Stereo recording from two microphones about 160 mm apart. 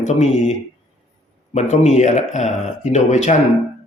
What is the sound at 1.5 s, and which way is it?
A man's voice, 45° left (ahead or behind).